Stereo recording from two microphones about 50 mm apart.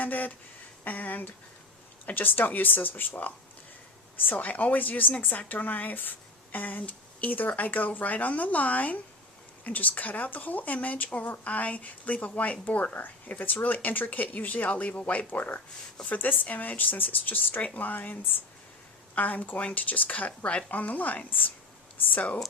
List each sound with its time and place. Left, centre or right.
0.0 s a woman's voice: left
4.2 s a woman's voice: left
15.3 s a woman's voice: left